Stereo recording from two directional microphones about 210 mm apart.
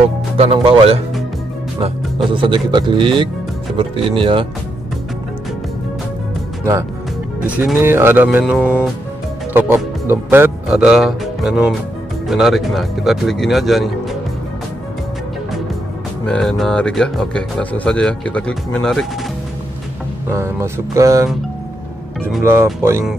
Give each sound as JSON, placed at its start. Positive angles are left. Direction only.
{"t": 0.4, "sound": "a man's voice", "side_deg": -25}
{"t": 2.3, "sound": "a man's voice", "side_deg": -20}
{"t": 6.7, "sound": "speech", "side_deg": -15}
{"t": 8.5, "sound": "speech", "side_deg": 10}
{"t": 9.5, "sound": "speech", "side_deg": -10}
{"t": 16.3, "sound": "speech", "side_deg": 5}
{"t": 20.2, "sound": "speech", "side_deg": -10}
{"t": 22.4, "sound": "speech", "side_deg": -10}